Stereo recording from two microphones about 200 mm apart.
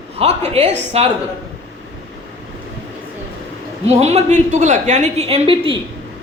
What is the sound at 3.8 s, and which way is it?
A woman's voice, 30° right (ahead or behind).